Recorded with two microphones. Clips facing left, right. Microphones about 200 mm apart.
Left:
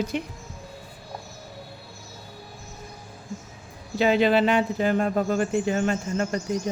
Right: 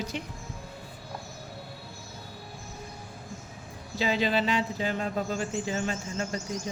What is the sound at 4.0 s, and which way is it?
Speech, 60° left (ahead or behind).